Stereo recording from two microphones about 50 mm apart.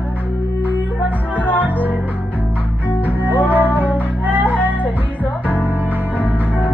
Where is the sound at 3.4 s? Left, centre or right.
Right.